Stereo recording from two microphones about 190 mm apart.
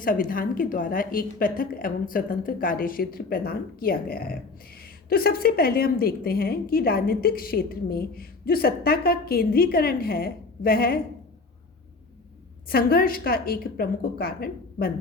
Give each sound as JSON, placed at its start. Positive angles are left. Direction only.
{"t": 0.0, "sound": "a woman's voice", "side_deg": 45}
{"t": 12.6, "sound": "a woman's voice", "side_deg": 50}